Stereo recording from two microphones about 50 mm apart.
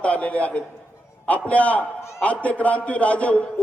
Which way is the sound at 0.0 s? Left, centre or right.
Left.